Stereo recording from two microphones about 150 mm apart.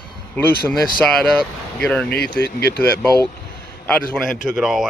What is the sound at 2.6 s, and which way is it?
Speech, 90° left.